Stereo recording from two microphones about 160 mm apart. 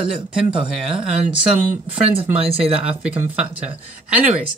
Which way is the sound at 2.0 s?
40° right (ahead or behind).